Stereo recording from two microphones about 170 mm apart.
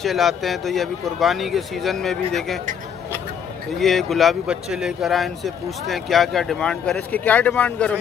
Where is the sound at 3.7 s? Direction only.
Centre (ahead or behind).